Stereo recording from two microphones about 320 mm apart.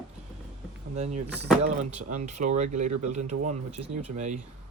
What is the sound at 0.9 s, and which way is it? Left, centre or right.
Speech, right.